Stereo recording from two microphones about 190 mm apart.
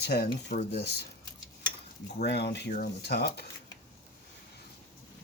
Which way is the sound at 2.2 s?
60° left (ahead or behind).